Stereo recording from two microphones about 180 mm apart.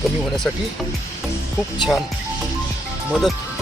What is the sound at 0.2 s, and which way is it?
Speech, 5° left (ahead or behind).